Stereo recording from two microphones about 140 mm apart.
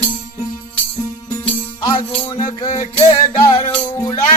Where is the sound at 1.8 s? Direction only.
30° left (ahead or behind).